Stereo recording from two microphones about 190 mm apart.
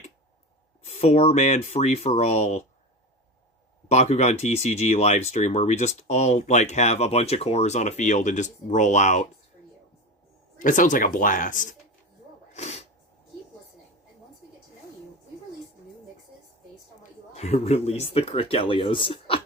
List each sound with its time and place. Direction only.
0.9 s speech: 35° left (ahead or behind)
3.8 s speech: 35° left (ahead or behind)
10.6 s speech: 45° left (ahead or behind)
12.5 s sneeze: 35° left (ahead or behind)
17.0 s speech: 35° left (ahead or behind)